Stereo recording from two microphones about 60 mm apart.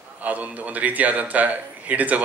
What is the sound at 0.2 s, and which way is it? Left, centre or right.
A man's voice, right.